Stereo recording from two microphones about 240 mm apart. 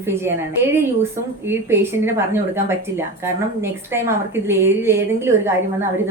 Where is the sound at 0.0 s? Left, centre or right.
Centre.